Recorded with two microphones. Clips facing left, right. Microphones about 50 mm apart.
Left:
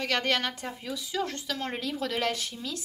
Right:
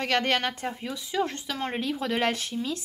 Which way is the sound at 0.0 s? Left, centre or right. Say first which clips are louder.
Right 3 dB; right.